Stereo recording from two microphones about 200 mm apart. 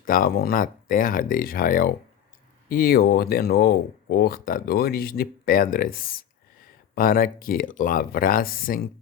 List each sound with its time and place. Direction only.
0.0 s speech: 45° left (ahead or behind)